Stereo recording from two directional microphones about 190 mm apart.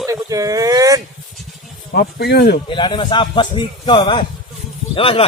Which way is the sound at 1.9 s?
60° left (ahead or behind).